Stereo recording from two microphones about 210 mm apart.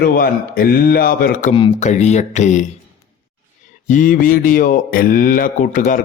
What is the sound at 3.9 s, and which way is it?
Speech, 40° left (ahead or behind).